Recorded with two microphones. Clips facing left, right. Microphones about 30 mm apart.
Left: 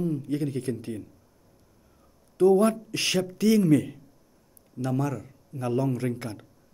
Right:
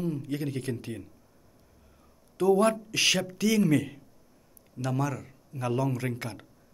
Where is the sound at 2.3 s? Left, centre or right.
Right.